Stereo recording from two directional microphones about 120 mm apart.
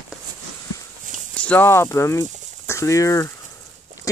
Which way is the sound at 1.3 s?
10° left (ahead or behind).